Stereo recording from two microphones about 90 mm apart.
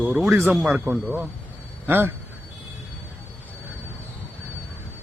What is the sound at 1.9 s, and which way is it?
Speech, 25° right (ahead or behind).